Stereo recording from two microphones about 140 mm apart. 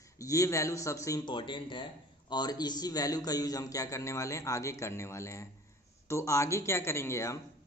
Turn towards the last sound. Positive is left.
turn(degrees=20)  # may be behind; listen again after turning